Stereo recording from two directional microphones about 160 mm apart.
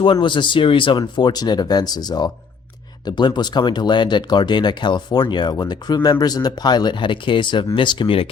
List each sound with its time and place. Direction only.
0.0 s speech: 30° left (ahead or behind)